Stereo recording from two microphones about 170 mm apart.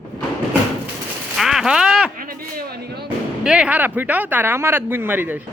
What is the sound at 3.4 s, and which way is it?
Speech, 5° right (ahead or behind).